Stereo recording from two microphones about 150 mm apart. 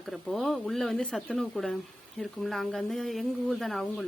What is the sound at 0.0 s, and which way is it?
Speech, centre (ahead or behind).